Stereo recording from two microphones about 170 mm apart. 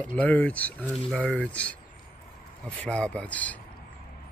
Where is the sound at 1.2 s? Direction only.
5° left (ahead or behind).